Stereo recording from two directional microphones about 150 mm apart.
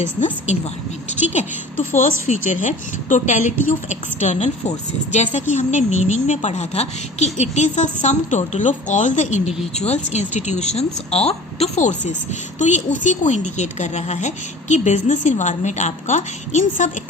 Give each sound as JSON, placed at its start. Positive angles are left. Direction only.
{"t": 1.3, "sound": "a woman's voice", "side_deg": 50}